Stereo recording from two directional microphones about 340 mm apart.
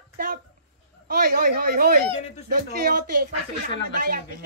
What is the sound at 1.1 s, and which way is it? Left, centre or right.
A woman's voice, right.